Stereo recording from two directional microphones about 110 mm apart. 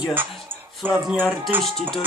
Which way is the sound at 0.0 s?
15° right (ahead or behind).